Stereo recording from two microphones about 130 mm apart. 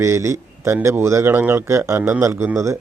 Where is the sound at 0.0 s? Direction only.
20° right (ahead or behind).